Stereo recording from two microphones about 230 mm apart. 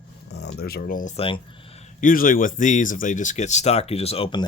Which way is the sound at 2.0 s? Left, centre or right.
Left.